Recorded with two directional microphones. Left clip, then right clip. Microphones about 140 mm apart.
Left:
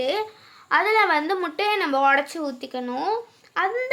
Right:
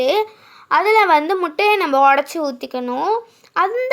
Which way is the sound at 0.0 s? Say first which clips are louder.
Right 8 dB; 45° right (ahead or behind).